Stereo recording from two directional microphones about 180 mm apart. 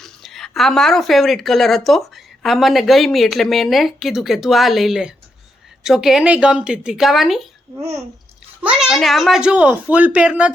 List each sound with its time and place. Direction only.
0.0 s speech: centre (ahead or behind)
7.8 s speech: 15° right (ahead or behind)
8.6 s speech: 5° right (ahead or behind)